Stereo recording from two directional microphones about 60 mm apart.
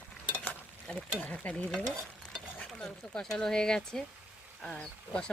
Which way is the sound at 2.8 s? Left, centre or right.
Centre.